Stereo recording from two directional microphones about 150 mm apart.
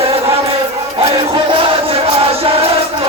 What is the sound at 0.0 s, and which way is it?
Chant, 40° right (ahead or behind).